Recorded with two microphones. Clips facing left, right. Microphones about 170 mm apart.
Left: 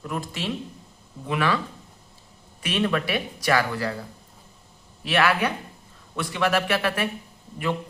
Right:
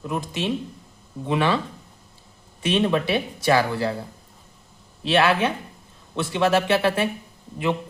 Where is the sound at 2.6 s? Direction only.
25° right (ahead or behind).